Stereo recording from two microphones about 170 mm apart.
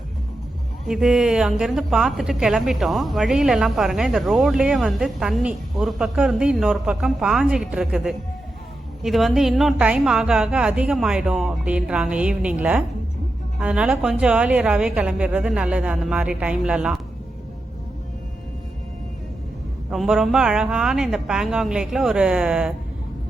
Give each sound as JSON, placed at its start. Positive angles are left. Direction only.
{"t": 0.9, "sound": "speech", "side_deg": -5}
{"t": 19.9, "sound": "speech", "side_deg": 0}